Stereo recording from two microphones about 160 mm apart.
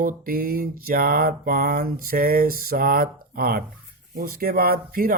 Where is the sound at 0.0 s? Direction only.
65° right (ahead or behind).